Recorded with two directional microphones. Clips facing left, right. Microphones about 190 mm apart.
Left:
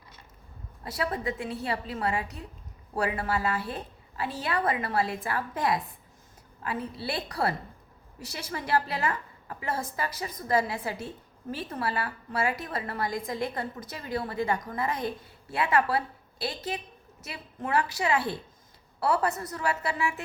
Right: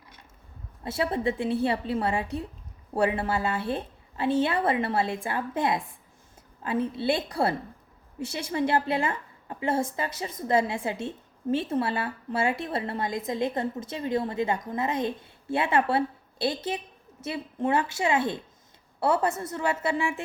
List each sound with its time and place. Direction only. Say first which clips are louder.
0.9 s a woman's voice: right 4 dB; 25° right (ahead or behind)